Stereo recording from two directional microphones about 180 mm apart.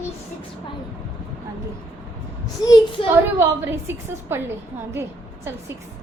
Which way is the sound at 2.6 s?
25° left (ahead or behind).